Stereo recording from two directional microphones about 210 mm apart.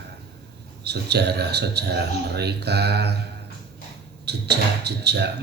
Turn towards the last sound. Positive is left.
turn(degrees=-50)  # may be behind; listen again after turning